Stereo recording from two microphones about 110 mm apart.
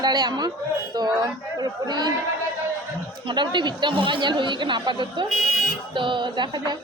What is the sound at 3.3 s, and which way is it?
A woman's voice, 45° right (ahead or behind).